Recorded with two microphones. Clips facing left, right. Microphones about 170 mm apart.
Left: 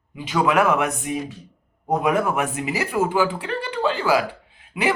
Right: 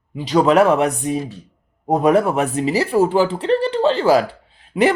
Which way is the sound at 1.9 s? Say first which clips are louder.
Right 5 dB; 35° right (ahead or behind).